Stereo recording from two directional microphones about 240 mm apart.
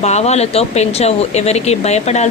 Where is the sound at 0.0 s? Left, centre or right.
Left.